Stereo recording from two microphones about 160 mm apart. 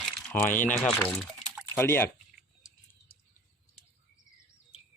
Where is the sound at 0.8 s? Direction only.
5° left (ahead or behind).